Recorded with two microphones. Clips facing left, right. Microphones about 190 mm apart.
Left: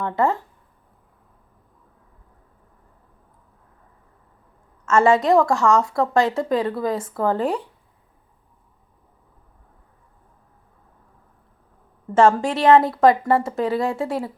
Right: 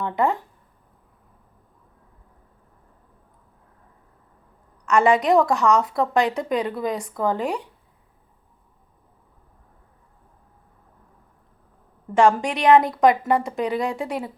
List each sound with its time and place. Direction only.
0.0 s a woman's voice: 20° right (ahead or behind)
4.9 s a woman's voice: 15° right (ahead or behind)
12.1 s a woman's voice: 15° right (ahead or behind)